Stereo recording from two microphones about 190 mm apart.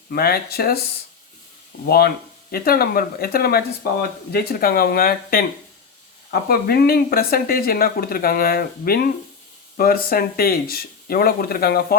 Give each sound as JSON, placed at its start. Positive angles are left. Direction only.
{"t": 0.1, "sound": "speech", "side_deg": 55}
{"t": 1.9, "sound": "speech", "side_deg": 55}